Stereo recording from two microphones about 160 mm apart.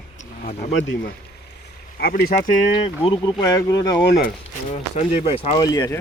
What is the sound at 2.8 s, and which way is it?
Speech, 35° left (ahead or behind).